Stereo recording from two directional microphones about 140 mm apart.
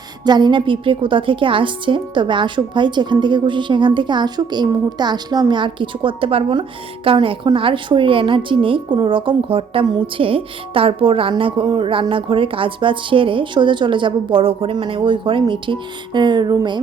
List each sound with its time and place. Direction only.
0.3 s a woman's voice: 30° right (ahead or behind)